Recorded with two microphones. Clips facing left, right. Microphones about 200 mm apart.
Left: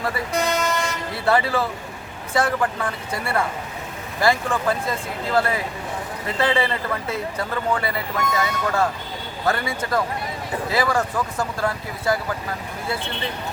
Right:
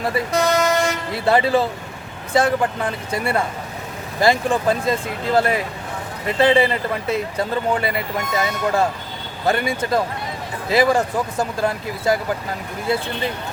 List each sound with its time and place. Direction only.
0.5 s toot: 40° right (ahead or behind)
1.1 s speech: 15° right (ahead or behind)